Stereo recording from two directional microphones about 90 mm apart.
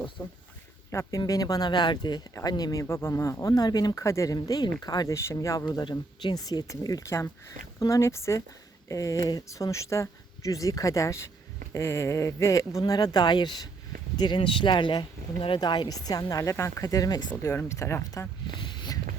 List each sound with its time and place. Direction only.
0.2 s speech: 30° left (ahead or behind)
1.3 s speech: 45° left (ahead or behind)
2.8 s speech: 30° left (ahead or behind)
4.4 s speech: 50° left (ahead or behind)
5.1 s speech: 35° left (ahead or behind)
12.8 s speech: 45° left (ahead or behind)
17.4 s speech: 30° left (ahead or behind)
18.4 s a sound: 55° left (ahead or behind)